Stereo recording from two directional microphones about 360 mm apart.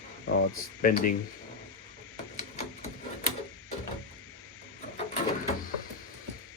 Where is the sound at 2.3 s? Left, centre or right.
Centre.